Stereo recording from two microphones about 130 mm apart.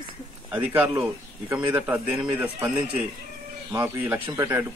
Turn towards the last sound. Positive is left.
turn(degrees=-15)  # may be behind; listen again after turning